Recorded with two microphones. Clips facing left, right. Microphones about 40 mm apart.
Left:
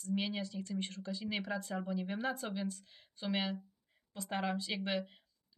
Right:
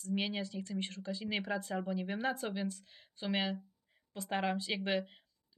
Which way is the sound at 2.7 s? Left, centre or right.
Right.